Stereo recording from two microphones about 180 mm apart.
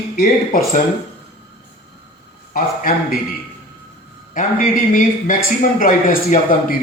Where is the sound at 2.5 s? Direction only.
50° left (ahead or behind).